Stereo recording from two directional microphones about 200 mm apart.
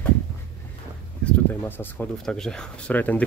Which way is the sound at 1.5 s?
5° left (ahead or behind).